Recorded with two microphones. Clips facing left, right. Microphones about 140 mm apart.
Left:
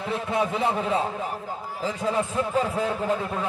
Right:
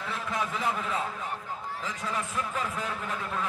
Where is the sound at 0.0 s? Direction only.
30° left (ahead or behind).